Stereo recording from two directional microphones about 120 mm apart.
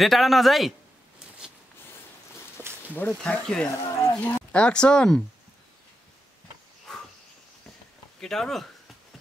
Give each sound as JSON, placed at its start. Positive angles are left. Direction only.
{"t": 0.0, "sound": "speech", "side_deg": 0}
{"t": 2.9, "sound": "speech", "side_deg": 15}
{"t": 3.8, "sound": "speech", "side_deg": 25}
{"t": 4.5, "sound": "speech", "side_deg": 10}
{"t": 8.2, "sound": "speech", "side_deg": 5}